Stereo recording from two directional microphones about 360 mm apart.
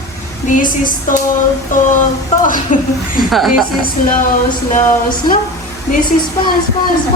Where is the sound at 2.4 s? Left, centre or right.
Left.